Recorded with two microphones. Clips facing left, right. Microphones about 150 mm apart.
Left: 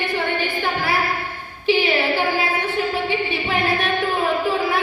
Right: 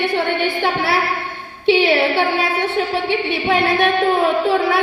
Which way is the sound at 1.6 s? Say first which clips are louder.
Right 4 dB; 75° right (ahead or behind).